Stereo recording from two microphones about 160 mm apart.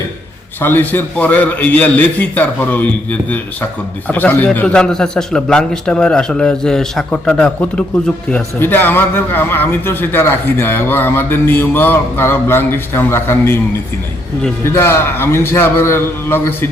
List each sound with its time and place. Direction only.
0.6 s a man's voice: 10° left (ahead or behind)
14.6 s a man's voice: 15° left (ahead or behind)